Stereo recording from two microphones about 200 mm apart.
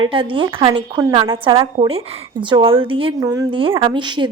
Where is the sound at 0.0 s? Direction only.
25° right (ahead or behind).